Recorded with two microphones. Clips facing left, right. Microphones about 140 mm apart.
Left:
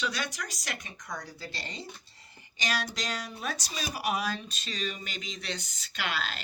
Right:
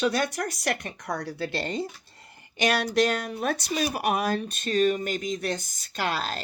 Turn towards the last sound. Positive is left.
turn(degrees=-40)  # may be behind; listen again after turning